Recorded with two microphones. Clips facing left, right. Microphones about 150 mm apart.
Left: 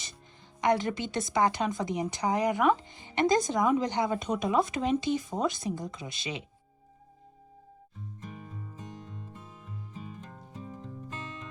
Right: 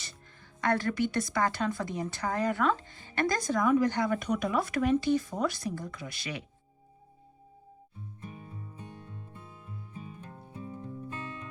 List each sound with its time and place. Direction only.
0.6 s a woman's voice: 20° left (ahead or behind)
10.6 s music: 20° left (ahead or behind)